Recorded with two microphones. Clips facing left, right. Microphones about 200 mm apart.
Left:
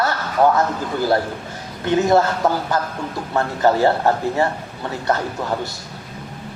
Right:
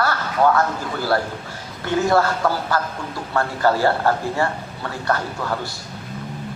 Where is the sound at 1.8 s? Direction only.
20° left (ahead or behind).